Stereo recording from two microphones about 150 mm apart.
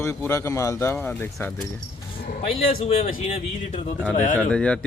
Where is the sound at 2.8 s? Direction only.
45° left (ahead or behind).